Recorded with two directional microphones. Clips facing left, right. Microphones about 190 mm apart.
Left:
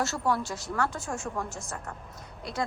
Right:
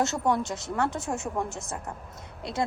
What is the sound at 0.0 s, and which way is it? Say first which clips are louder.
A woman's voice: right 3 dB; 20° right (ahead or behind).